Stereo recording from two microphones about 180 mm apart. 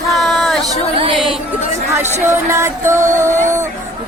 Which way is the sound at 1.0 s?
30° right (ahead or behind).